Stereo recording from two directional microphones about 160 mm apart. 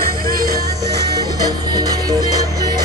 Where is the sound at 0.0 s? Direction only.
70° right (ahead or behind).